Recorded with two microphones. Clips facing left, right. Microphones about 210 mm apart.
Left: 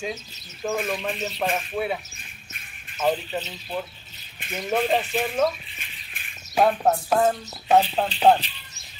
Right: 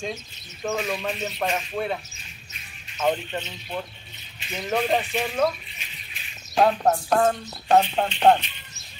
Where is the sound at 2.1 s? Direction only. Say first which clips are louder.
Left 1 dB; 50° left (ahead or behind).